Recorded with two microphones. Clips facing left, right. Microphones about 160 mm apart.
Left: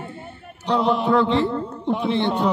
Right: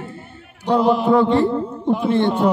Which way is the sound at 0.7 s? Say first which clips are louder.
Right 4 dB; centre (ahead or behind).